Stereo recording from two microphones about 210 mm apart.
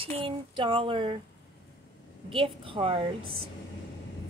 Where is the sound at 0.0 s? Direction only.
25° right (ahead or behind).